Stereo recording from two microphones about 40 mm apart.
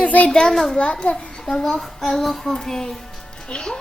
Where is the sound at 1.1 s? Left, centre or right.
Centre.